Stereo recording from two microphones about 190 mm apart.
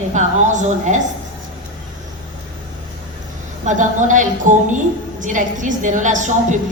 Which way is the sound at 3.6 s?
40° right (ahead or behind).